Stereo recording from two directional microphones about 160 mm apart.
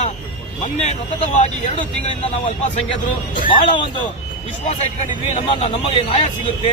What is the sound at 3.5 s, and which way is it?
Speech, 30° left (ahead or behind).